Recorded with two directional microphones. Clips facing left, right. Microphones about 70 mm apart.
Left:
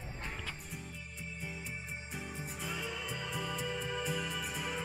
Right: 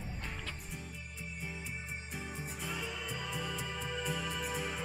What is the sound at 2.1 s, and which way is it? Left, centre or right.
Music, centre.